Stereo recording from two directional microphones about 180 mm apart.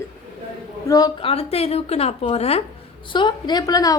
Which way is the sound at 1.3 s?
35° left (ahead or behind).